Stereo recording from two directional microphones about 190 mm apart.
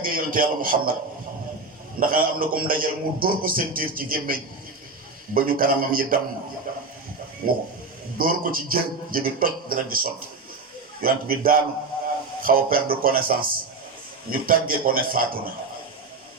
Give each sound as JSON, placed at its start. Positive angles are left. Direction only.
{"t": 0.0, "sound": "a man's voice", "side_deg": -45}
{"t": 2.0, "sound": "a man's voice", "side_deg": -50}
{"t": 7.4, "sound": "a man's voice", "side_deg": -50}